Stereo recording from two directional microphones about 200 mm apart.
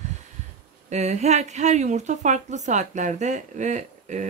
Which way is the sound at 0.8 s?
35° right (ahead or behind).